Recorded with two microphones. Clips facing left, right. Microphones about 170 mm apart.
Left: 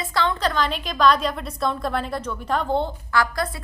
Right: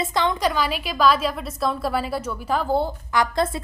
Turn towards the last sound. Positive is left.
turn(degrees=-25)  # may be behind; listen again after turning